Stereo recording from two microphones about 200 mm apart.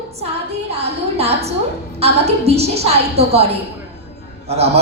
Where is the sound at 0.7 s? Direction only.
30° right (ahead or behind).